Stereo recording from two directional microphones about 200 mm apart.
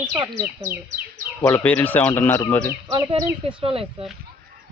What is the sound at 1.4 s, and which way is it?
Speech, 10° left (ahead or behind).